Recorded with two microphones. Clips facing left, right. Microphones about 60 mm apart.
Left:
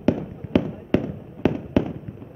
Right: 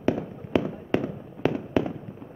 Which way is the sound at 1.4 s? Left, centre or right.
Centre.